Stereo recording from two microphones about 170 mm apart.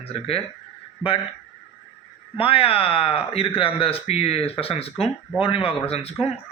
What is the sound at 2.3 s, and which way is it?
A man's voice, 35° left (ahead or behind).